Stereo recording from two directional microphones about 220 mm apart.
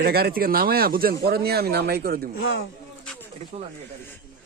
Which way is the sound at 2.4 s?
50° left (ahead or behind).